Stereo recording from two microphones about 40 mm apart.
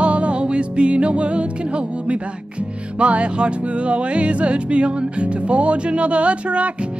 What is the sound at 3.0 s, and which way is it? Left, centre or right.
Speech, right.